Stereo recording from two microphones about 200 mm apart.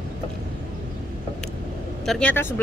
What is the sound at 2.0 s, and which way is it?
Speech, 5° left (ahead or behind).